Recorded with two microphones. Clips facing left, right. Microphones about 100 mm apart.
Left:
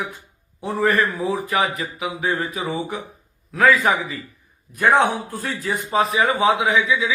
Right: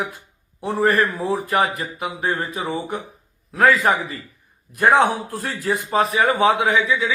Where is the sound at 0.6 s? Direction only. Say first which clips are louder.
Right 1 dB; 30° right (ahead or behind).